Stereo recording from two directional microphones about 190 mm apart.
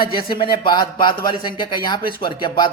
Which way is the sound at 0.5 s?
25° left (ahead or behind).